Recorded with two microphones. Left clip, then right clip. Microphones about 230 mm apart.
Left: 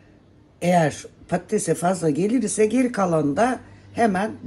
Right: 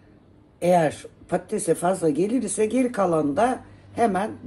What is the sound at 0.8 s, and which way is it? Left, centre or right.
Speech, centre.